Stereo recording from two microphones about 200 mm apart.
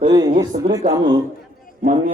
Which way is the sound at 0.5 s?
40° right (ahead or behind).